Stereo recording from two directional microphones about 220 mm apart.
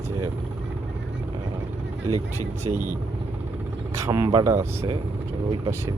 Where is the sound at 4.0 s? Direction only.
15° right (ahead or behind).